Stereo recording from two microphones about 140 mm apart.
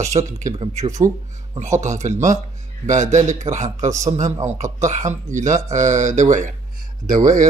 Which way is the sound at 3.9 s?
20° right (ahead or behind).